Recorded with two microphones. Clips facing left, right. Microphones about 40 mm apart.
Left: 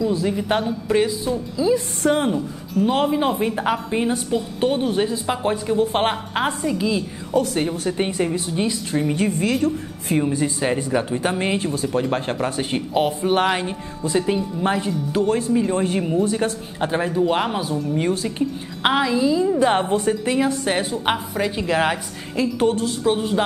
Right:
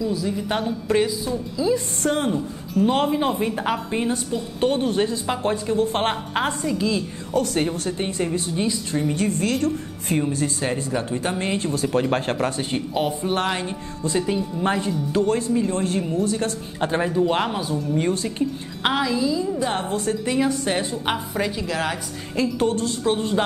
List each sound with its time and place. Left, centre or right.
0.1 s speech: left
0.6 s a woman's voice: centre
1.0 s a woman's voice: centre
11.9 s a woman's voice: centre
12.5 s a woman's voice: centre
18.9 s a woman's voice: centre
22.3 s a woman's voice: centre